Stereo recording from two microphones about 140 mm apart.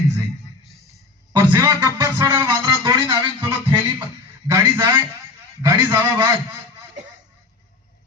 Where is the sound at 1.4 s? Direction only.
30° right (ahead or behind).